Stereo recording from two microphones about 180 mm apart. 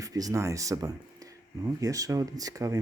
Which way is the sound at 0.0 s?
20° right (ahead or behind).